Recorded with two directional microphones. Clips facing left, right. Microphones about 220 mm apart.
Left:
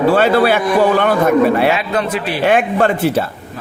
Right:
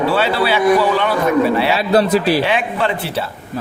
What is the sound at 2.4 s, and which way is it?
Speech, 50° left (ahead or behind).